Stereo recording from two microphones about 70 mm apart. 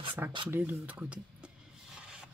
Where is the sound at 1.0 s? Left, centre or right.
Centre.